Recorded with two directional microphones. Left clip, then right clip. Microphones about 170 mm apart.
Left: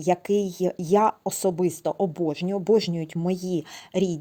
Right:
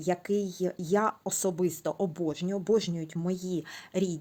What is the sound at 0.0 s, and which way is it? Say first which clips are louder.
Speech: left 7 dB; 35° left (ahead or behind).